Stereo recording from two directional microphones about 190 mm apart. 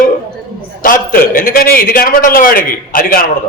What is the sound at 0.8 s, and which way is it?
A man's voice, 45° left (ahead or behind).